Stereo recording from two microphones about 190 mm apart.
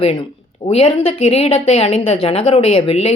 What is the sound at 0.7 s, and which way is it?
Speech, 30° left (ahead or behind).